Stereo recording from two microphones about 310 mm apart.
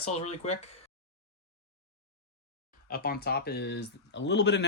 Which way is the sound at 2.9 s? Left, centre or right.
Left.